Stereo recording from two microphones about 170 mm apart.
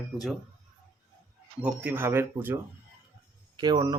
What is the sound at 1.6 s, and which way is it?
Speech, 10° right (ahead or behind).